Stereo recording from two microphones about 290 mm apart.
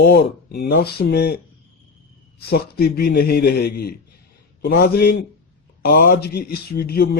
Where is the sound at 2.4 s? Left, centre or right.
Left.